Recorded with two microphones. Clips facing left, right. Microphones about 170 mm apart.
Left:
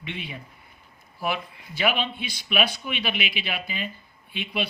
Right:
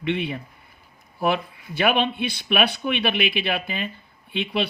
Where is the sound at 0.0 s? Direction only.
60° right (ahead or behind).